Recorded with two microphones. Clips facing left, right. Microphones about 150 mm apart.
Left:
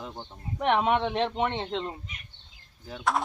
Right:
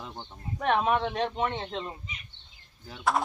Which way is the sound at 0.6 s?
20° left (ahead or behind).